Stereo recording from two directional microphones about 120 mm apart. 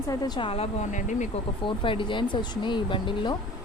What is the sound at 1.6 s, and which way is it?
Speech, 45° left (ahead or behind).